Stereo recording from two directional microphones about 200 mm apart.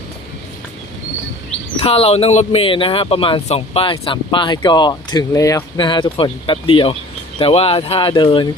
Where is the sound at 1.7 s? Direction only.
30° left (ahead or behind).